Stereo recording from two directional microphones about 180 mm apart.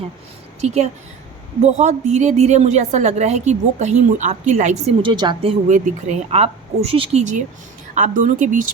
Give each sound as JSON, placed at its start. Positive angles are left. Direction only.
{"t": 0.6, "sound": "a woman's voice", "side_deg": -35}
{"t": 5.0, "sound": "a woman's voice", "side_deg": -25}